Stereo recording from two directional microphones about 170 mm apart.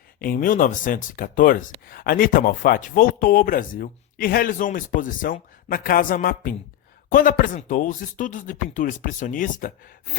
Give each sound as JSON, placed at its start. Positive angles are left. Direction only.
{"t": 0.2, "sound": "speech", "side_deg": 55}